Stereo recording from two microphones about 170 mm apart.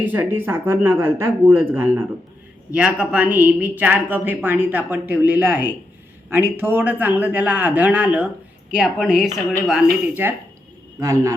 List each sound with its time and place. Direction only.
0.0 s a woman's voice: 10° right (ahead or behind)
11.0 s a woman's voice: 15° right (ahead or behind)